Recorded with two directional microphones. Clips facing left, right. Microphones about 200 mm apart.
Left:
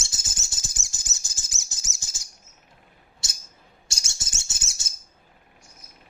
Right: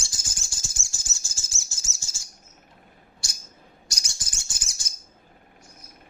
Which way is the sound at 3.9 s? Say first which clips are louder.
Left 2 dB; 25° left (ahead or behind).